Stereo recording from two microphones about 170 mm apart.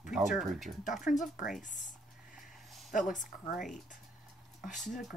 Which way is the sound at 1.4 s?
50° left (ahead or behind).